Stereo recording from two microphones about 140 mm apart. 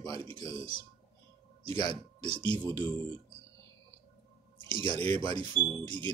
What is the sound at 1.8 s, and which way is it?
Speech, 30° left (ahead or behind).